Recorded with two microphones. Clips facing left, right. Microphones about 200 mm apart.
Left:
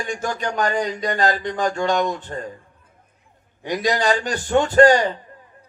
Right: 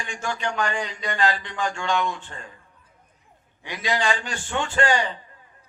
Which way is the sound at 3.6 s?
40° left (ahead or behind).